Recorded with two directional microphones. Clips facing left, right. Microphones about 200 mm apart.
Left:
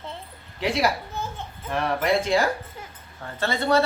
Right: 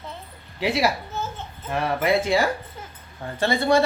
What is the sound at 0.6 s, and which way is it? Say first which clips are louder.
A woman's voice: right 1 dB; 5° right (ahead or behind).